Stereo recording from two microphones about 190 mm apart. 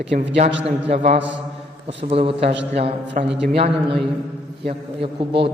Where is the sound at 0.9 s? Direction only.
35° right (ahead or behind).